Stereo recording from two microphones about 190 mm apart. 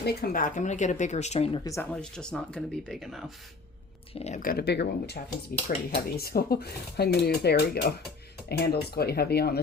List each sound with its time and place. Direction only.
0.0 s speech: 55° left (ahead or behind); by 1.6 s 35° left (ahead or behind)
1.6 s speech: 15° left (ahead or behind)
4.1 s speech: 35° left (ahead or behind); by 9.6 s 55° left (ahead or behind)